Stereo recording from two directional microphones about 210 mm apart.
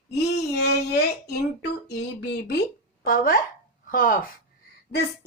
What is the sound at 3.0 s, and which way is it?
A woman's voice, 45° left (ahead or behind).